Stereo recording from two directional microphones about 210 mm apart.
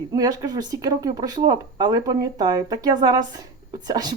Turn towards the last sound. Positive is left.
turn(degrees=-20)  # may be behind; listen again after turning